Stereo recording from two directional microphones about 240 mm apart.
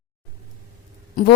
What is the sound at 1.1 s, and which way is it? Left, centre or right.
Speech, left.